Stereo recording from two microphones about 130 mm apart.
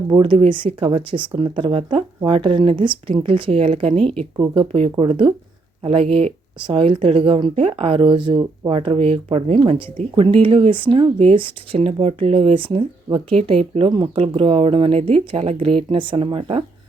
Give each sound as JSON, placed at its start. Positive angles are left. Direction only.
{"t": 0.1, "sound": "speech", "side_deg": -40}
{"t": 3.9, "sound": "speech", "side_deg": 5}
{"t": 4.4, "sound": "speech", "side_deg": -40}